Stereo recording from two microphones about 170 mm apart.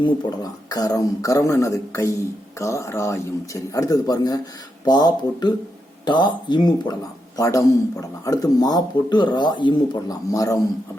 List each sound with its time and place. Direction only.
0.0 s speech: 20° left (ahead or behind)